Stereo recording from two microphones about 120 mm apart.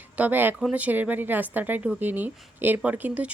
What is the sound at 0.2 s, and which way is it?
Speech, 15° right (ahead or behind).